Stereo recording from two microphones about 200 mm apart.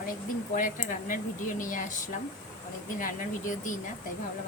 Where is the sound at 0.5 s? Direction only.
40° left (ahead or behind).